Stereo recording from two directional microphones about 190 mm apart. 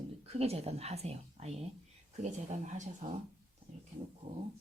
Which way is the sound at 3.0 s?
40° right (ahead or behind).